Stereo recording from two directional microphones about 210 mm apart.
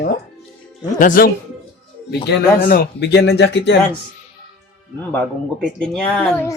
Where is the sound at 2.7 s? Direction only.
50° left (ahead or behind).